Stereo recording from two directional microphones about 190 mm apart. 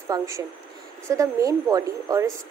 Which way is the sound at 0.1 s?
20° right (ahead or behind).